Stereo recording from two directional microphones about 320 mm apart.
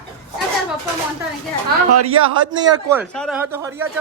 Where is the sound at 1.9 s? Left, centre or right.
Right.